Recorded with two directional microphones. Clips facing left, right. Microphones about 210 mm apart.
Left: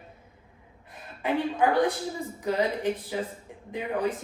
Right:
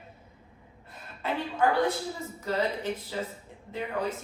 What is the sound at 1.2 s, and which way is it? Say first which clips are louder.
Speech: left 3 dB; 15° left (ahead or behind).